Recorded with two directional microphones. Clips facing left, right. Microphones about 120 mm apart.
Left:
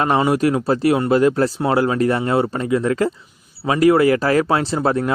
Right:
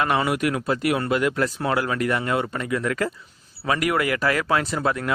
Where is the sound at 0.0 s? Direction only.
30° left (ahead or behind).